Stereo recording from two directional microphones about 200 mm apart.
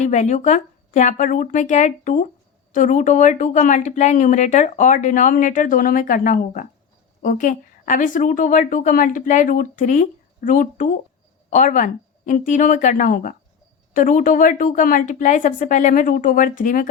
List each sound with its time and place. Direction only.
0.0 s speech: 35° left (ahead or behind)